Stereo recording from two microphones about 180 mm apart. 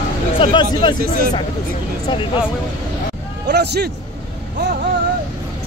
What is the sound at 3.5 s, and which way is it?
Speech, 65° right (ahead or behind).